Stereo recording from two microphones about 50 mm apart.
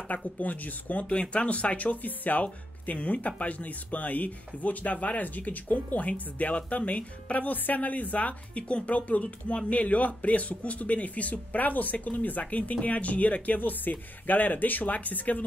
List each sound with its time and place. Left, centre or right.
0.4 s speech: left